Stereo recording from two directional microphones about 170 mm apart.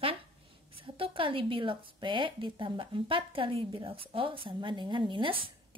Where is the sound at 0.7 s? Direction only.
30° right (ahead or behind).